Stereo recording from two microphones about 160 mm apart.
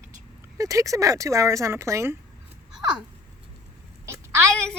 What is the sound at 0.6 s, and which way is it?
Speech, 20° right (ahead or behind).